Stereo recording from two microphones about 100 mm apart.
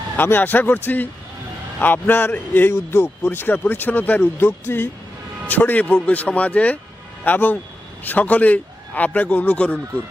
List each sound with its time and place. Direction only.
0.2 s a man's voice: 20° left (ahead or behind)